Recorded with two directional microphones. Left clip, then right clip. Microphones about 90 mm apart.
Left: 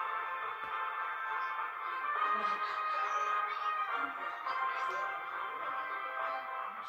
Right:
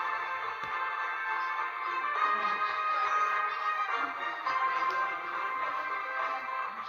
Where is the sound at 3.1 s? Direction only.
65° right (ahead or behind).